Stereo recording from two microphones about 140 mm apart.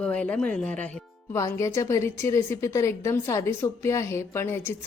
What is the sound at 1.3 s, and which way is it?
A woman's voice, 20° left (ahead or behind).